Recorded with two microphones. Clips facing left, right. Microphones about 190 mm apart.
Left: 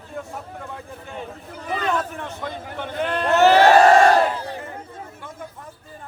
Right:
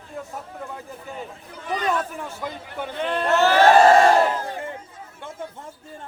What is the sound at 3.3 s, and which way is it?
Crowd, 15° left (ahead or behind).